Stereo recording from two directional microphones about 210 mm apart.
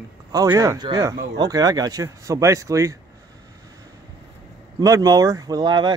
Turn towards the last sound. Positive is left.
turn(degrees=-20)  # may be behind; listen again after turning